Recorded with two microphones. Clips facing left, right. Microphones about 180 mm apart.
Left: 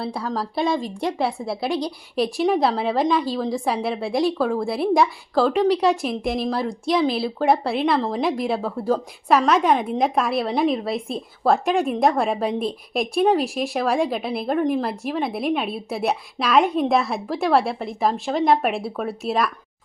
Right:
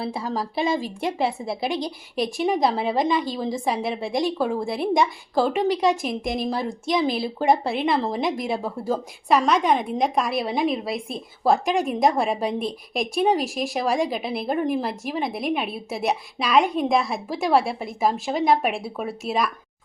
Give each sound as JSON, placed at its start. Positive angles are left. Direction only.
{"t": 0.0, "sound": "a woman's voice", "side_deg": -5}